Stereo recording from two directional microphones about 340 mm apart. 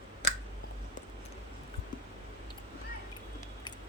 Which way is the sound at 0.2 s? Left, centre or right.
Left.